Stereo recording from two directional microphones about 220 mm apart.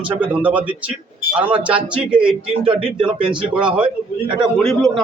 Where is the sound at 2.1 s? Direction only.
25° right (ahead or behind).